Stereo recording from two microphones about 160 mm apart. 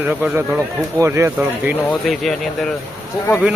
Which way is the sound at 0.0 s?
10° right (ahead or behind).